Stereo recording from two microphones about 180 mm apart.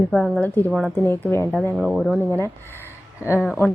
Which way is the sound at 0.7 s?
5° right (ahead or behind).